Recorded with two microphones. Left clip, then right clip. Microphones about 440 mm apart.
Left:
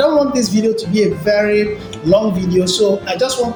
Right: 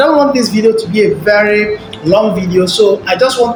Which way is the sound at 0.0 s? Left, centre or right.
Left.